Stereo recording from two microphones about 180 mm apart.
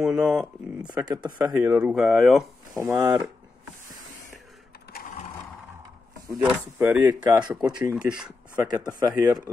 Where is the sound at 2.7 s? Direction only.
15° right (ahead or behind).